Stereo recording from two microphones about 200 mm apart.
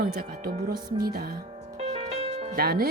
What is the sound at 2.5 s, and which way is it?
Speech, 50° right (ahead or behind).